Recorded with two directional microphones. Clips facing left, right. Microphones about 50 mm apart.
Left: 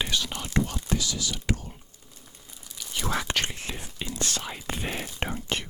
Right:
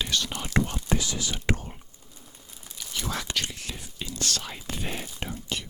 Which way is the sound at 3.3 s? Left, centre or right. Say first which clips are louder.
Left 3 dB; left.